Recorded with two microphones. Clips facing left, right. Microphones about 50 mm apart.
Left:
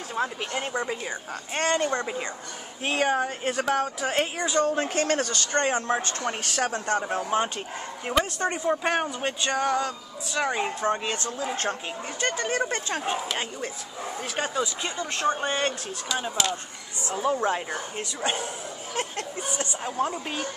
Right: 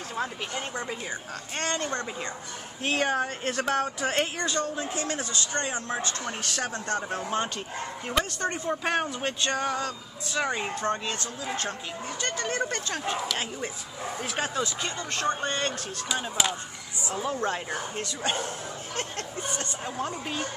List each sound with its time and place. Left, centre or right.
0.2 s speech: centre
1.5 s speech: left
2.8 s speech: centre
4.7 s speech: left
5.5 s speech: left
7.0 s speech: centre
8.8 s speech: centre
11.1 s speech: left
12.2 s speech: centre
14.2 s speech: centre
17.1 s speech: centre